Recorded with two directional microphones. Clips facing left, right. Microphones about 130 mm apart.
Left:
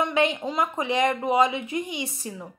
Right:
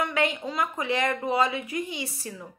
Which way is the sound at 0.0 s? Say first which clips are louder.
Left 3 dB; 20° left (ahead or behind).